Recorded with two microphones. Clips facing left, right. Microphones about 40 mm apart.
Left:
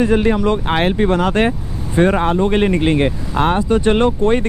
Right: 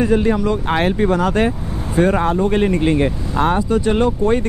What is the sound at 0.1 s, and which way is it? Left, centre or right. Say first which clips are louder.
Speech: left 1 dB; left.